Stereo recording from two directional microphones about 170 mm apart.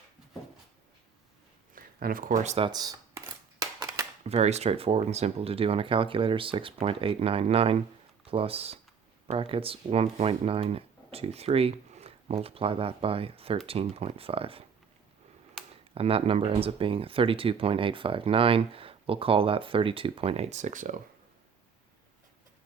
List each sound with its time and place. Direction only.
1.7 s speech: 60° right (ahead or behind); by 2.6 s 40° right (ahead or behind)
2.6 s a sound: 20° right (ahead or behind)
4.2 s speech: 40° right (ahead or behind)
16.0 s speech: 35° right (ahead or behind)